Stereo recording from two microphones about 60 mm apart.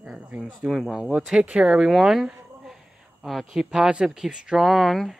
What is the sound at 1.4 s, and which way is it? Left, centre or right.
Speech, centre.